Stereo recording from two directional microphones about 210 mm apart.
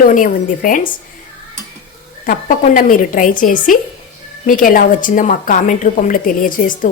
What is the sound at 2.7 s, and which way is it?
Speech, 40° left (ahead or behind).